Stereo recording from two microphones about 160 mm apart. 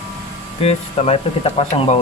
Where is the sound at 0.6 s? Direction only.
40° left (ahead or behind).